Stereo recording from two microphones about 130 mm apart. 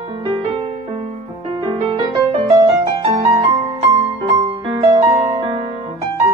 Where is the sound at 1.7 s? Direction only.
45° right (ahead or behind).